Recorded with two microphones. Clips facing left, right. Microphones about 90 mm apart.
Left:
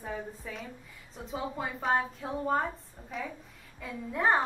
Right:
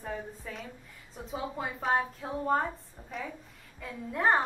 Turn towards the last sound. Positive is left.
turn(degrees=0)  # may be behind; listen again after turning